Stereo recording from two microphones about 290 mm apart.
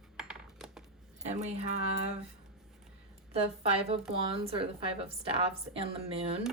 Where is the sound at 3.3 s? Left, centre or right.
Right.